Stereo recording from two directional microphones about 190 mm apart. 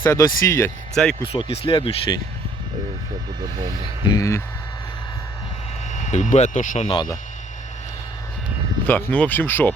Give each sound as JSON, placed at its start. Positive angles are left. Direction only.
{"t": 0.0, "sound": "speech", "side_deg": 20}
{"t": 1.0, "sound": "speech", "side_deg": 5}
{"t": 1.3, "sound": "speech", "side_deg": 30}
{"t": 4.0, "sound": "speech", "side_deg": 20}
{"t": 5.9, "sound": "speech", "side_deg": 40}
{"t": 6.8, "sound": "speech", "side_deg": 25}
{"t": 8.9, "sound": "speech", "side_deg": 10}